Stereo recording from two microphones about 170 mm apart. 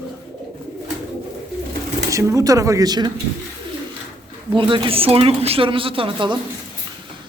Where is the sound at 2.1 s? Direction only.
20° right (ahead or behind).